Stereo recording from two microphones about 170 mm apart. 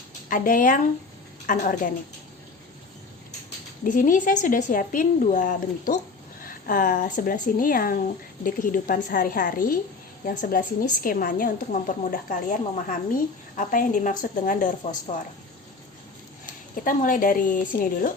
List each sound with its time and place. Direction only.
0.3 s a woman's voice: 55° left (ahead or behind)
3.8 s a woman's voice: 50° left (ahead or behind)
16.7 s a woman's voice: 55° left (ahead or behind)